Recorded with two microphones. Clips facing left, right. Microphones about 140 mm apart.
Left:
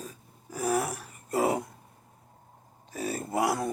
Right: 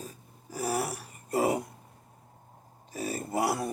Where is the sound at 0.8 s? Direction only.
45° left (ahead or behind).